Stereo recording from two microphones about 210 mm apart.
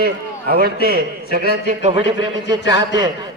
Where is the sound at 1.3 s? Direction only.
45° right (ahead or behind).